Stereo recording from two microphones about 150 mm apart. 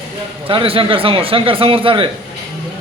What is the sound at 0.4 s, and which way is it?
A man's voice, 35° right (ahead or behind).